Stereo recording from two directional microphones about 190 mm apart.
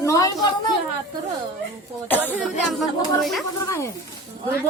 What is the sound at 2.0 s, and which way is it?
A woman's voice, 10° left (ahead or behind).